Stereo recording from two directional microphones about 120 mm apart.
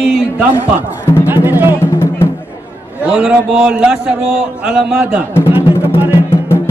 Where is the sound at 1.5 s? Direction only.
15° right (ahead or behind).